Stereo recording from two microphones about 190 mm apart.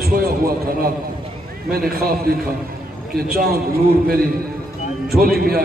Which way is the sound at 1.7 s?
50° right (ahead or behind).